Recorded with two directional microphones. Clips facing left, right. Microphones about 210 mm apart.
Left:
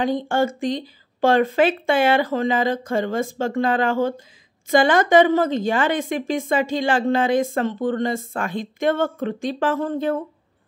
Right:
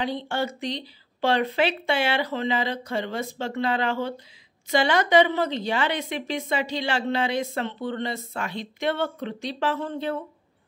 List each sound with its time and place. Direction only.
0.0 s a woman's voice: 45° left (ahead or behind)